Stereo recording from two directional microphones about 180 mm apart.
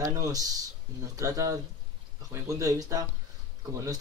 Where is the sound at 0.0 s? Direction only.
20° right (ahead or behind).